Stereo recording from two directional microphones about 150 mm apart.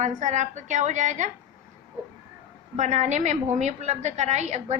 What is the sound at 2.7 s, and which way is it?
A woman's voice, 55° right (ahead or behind).